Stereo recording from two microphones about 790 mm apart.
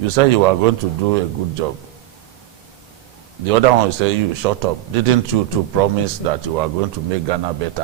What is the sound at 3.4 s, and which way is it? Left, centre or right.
A man's voice, right.